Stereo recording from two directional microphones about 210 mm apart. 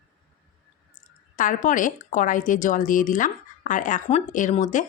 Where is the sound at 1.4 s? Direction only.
40° left (ahead or behind).